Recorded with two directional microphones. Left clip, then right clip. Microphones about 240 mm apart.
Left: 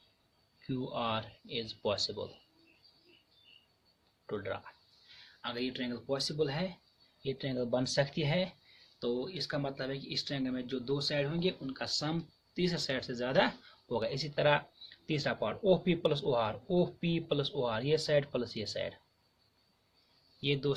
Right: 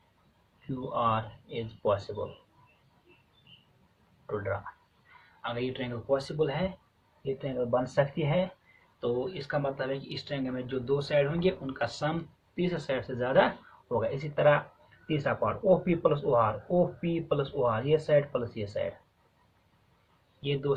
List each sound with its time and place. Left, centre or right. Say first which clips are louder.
0.9 s speech: right 9 dB; left
5.4 s speech: right 4 dB; left
12.5 s speech: right 3 dB; left
20.4 s speech: right 3 dB; left